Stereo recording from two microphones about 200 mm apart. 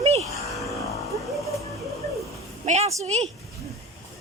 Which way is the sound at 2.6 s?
35° right (ahead or behind).